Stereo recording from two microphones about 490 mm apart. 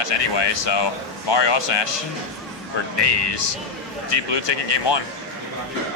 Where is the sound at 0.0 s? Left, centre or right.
Left.